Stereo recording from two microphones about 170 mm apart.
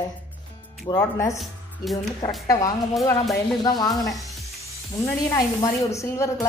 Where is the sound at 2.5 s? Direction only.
20° left (ahead or behind).